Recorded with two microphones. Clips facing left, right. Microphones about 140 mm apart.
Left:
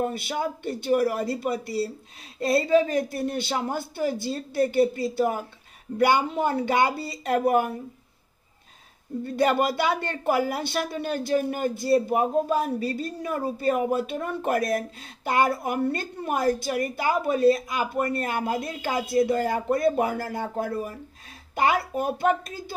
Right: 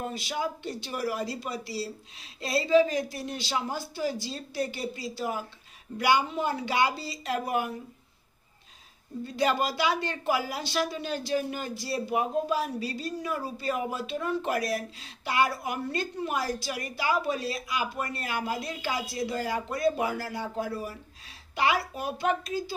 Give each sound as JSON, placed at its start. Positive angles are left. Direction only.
{"t": 0.0, "sound": "speech", "side_deg": 55}
{"t": 9.2, "sound": "speech", "side_deg": 55}